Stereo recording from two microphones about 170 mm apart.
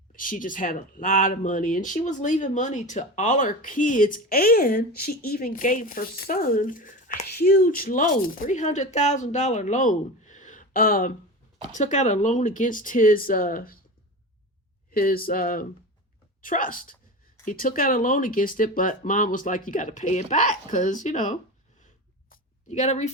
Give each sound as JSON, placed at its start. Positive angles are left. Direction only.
{"t": 0.1, "sound": "speech", "side_deg": 50}
{"t": 11.7, "sound": "speech", "side_deg": 45}
{"t": 14.9, "sound": "speech", "side_deg": 60}
{"t": 22.3, "sound": "a sound", "side_deg": 40}